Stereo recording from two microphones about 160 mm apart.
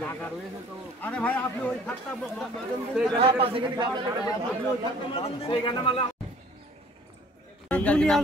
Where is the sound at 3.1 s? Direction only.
35° right (ahead or behind).